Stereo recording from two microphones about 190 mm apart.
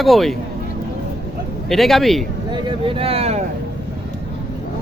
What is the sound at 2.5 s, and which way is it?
Speech, 25° right (ahead or behind).